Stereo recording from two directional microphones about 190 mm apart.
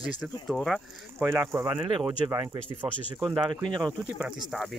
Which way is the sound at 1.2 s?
15° right (ahead or behind).